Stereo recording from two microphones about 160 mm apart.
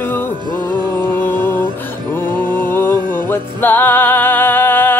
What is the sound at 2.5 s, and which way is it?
Music, 15° left (ahead or behind).